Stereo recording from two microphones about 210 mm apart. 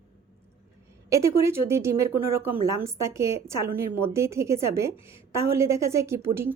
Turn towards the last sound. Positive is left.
turn(degrees=-10)  # may be behind; listen again after turning